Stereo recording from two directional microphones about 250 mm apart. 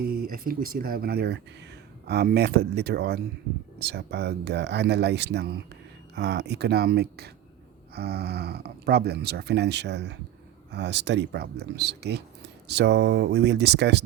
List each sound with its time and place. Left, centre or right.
0.0 s speech: right